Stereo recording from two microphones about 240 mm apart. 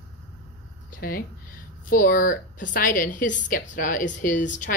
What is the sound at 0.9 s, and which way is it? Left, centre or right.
Speech, left.